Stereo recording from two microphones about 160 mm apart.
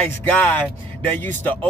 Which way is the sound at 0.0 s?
10° left (ahead or behind).